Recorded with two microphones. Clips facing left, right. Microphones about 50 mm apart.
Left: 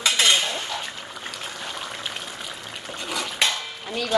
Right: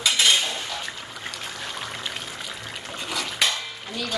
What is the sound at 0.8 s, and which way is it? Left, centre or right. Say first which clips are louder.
Water: even; centre.